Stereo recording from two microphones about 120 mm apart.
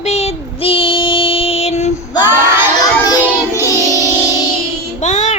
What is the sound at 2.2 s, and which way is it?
Child singing, 20° right (ahead or behind).